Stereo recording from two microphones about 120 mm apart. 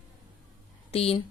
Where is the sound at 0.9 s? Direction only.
55° left (ahead or behind).